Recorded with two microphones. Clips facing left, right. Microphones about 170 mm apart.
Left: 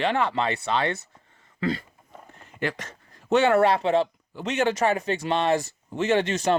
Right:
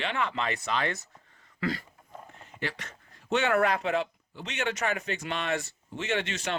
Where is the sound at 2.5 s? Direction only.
45° left (ahead or behind); by 4.1 s 30° left (ahead or behind).